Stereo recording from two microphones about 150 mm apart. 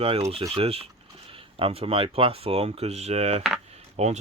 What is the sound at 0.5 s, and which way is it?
Speech, 40° right (ahead or behind).